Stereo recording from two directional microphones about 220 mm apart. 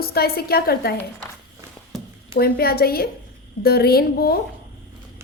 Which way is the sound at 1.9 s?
Centre (ahead or behind).